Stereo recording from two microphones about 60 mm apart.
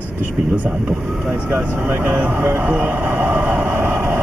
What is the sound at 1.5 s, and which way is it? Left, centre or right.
Vehicle, right.